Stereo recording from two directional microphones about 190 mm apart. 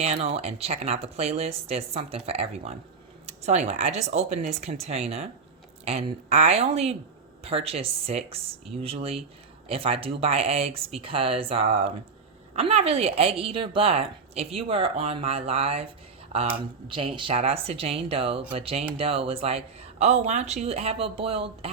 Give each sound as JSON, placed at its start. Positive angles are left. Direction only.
{"t": 0.0, "sound": "a woman's voice", "side_deg": -35}